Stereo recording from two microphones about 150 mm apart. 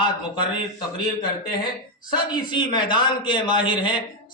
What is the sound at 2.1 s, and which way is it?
A man's voice, 30° left (ahead or behind).